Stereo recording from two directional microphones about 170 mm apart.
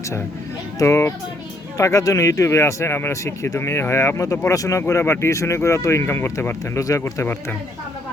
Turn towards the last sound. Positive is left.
turn(degrees=15)  # may be behind; listen again after turning